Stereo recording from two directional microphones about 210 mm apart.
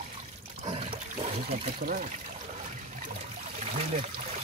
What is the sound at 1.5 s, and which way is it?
Speech, 35° right (ahead or behind).